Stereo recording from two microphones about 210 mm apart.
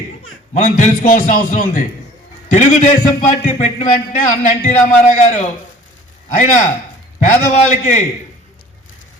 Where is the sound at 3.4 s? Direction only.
35° left (ahead or behind).